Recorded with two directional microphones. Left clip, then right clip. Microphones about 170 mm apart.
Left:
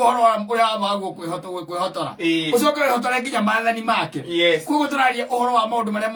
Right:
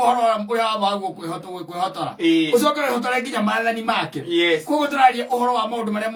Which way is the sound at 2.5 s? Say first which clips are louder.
Left 1 dB; 20° left (ahead or behind).